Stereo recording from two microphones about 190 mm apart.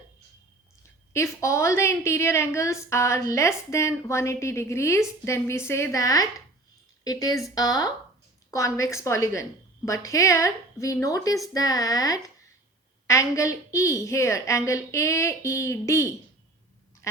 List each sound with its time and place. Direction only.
1.1 s a woman's voice: 15° left (ahead or behind)